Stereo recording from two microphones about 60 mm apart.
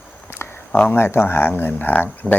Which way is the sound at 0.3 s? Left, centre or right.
Left.